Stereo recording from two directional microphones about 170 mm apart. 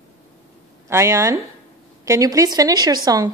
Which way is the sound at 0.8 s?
15° right (ahead or behind).